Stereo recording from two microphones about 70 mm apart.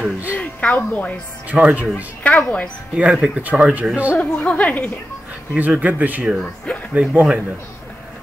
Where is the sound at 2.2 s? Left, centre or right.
Left.